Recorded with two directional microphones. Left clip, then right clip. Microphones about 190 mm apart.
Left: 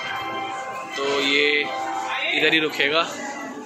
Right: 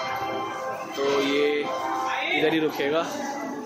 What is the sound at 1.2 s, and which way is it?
A man's voice, 10° right (ahead or behind).